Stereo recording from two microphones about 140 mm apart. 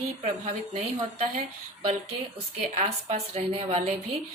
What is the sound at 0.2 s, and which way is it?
Speech, 55° right (ahead or behind).